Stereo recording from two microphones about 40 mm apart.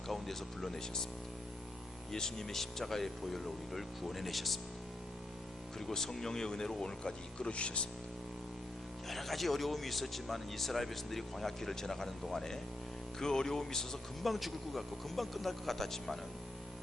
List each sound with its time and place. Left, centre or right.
0.1 s speech: centre
2.1 s speech: centre
5.9 s speech: centre; by 7.9 s left
9.0 s speech: centre
14.3 s speech: centre